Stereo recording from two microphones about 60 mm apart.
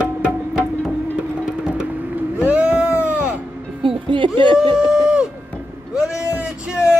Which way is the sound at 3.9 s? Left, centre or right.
Centre.